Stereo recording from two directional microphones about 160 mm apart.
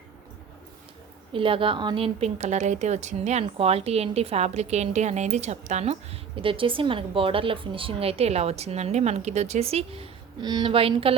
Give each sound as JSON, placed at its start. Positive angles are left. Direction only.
{"t": 1.3, "sound": "a woman's voice", "side_deg": -35}